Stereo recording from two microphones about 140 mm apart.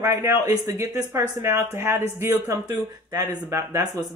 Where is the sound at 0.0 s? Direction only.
20° right (ahead or behind).